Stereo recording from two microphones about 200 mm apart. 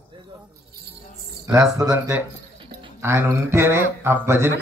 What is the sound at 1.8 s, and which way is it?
Speech, 15° right (ahead or behind).